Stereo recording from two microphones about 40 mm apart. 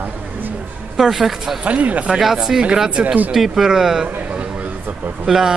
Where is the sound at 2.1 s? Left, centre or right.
Centre.